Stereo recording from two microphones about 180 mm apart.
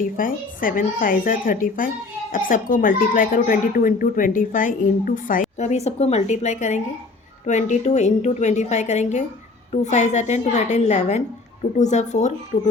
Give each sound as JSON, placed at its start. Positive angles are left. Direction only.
{"t": 0.0, "sound": "a woman's voice", "side_deg": 50}